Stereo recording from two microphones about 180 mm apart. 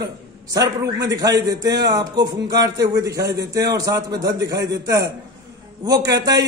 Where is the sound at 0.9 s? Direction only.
20° right (ahead or behind).